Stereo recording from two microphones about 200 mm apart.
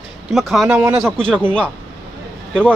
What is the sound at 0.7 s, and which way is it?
Speech, 10° right (ahead or behind).